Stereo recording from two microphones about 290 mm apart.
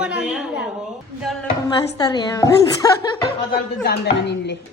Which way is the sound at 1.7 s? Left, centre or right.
Centre.